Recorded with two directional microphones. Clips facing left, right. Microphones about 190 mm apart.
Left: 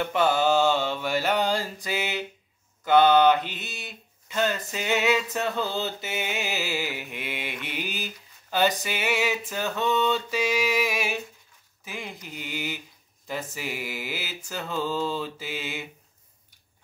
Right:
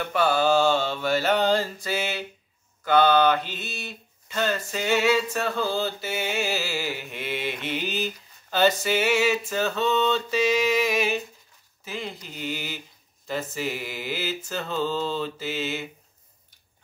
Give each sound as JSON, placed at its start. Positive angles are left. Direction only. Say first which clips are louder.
{"t": 0.0, "sound": "mantra", "louder": "even", "side_deg": 20}
{"t": 2.8, "sound": "speech", "louder": "left 1 dB", "side_deg": 20}